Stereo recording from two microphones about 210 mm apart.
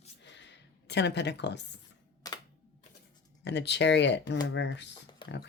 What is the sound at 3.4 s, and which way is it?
Speech, 55° left (ahead or behind).